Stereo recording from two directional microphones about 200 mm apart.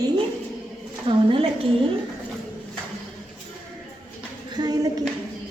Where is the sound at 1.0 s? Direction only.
25° right (ahead or behind).